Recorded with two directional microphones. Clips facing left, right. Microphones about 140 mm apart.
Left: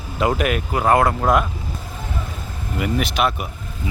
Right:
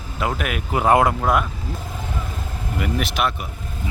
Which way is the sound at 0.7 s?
15° right (ahead or behind).